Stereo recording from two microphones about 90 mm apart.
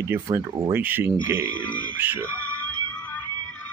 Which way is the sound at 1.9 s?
20° right (ahead or behind).